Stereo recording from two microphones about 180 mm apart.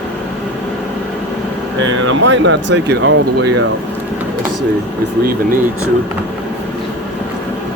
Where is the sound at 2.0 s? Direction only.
90° right.